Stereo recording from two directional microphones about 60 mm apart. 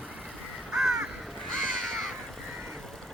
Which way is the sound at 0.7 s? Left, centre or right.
Centre.